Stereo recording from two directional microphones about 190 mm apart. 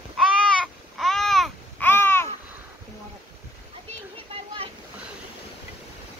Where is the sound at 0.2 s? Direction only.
Centre (ahead or behind).